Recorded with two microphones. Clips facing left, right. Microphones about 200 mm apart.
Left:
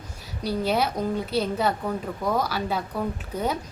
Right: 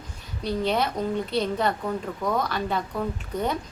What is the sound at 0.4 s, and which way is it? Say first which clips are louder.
A woman's voice: left 1 dB; 5° left (ahead or behind).